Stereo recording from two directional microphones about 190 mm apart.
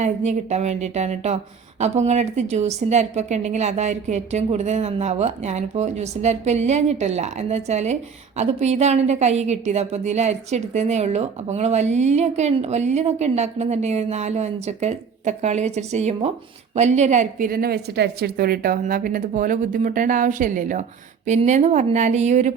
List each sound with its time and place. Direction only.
0.0 s a woman's voice: 35° right (ahead or behind)